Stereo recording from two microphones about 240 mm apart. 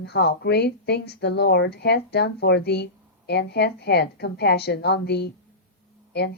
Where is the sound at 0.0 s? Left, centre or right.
Left.